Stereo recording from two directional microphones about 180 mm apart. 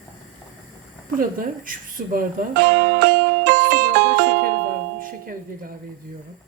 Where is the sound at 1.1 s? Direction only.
50° right (ahead or behind).